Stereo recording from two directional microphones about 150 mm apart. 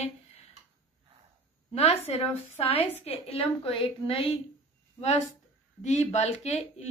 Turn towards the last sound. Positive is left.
turn(degrees=45)  # may be behind; listen again after turning